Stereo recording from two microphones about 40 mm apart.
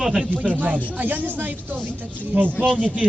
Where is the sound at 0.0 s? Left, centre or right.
Right.